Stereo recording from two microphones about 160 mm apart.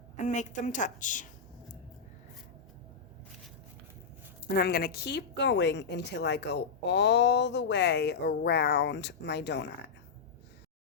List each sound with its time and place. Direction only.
0.2 s a woman's voice: 50° left (ahead or behind)
4.4 s a woman's voice: 70° left (ahead or behind); by 9.6 s 90° left